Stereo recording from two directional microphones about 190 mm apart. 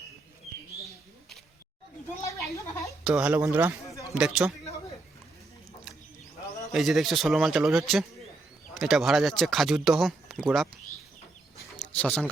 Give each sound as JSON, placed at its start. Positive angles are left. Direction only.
{"t": 2.2, "sound": "a sound", "side_deg": 15}
{"t": 3.0, "sound": "speech", "side_deg": -5}
{"t": 6.7, "sound": "speech", "side_deg": 0}
{"t": 11.9, "sound": "speech", "side_deg": 5}